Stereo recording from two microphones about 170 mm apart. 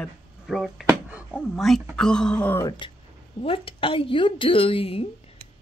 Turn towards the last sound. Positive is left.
turn(degrees=35)  # may be behind; listen again after turning